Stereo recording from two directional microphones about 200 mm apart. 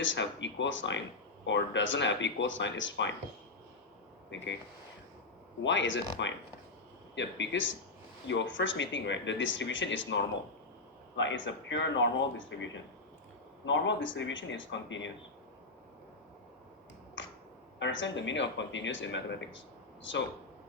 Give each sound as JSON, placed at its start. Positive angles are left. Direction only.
{"t": 0.0, "sound": "speech", "side_deg": 65}
{"t": 4.3, "sound": "speech", "side_deg": 65}
{"t": 5.6, "sound": "speech", "side_deg": 70}
{"t": 17.2, "sound": "finger snapping", "side_deg": 70}
{"t": 17.7, "sound": "speech", "side_deg": 65}